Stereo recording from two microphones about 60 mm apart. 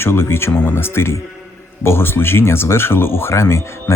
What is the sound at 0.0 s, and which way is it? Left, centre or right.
Speech, left.